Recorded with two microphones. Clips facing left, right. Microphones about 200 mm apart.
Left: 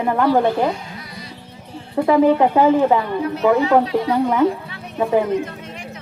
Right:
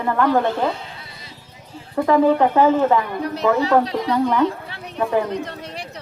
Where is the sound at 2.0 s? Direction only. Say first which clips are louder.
Left 1 dB; 10° left (ahead or behind).